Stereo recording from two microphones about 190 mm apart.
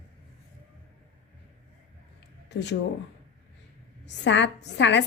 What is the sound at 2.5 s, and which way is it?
Speech, 65° left (ahead or behind).